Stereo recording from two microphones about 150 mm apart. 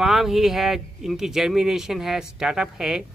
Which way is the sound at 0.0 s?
Centre (ahead or behind).